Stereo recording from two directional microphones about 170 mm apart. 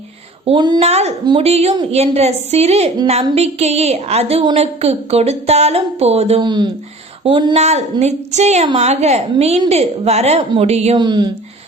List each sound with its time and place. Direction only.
0.4 s speech: 25° right (ahead or behind)
0.8 s a woman's voice: 40° right (ahead or behind)
7.5 s a woman's voice: 40° right (ahead or behind)
10.9 s speech: 25° right (ahead or behind)